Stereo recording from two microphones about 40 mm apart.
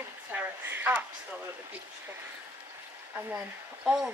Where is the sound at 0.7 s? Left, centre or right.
Right.